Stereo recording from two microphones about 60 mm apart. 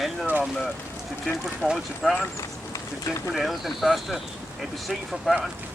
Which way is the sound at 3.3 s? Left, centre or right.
Centre.